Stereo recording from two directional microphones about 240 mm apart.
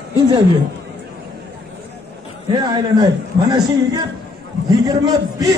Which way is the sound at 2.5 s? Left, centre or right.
Centre.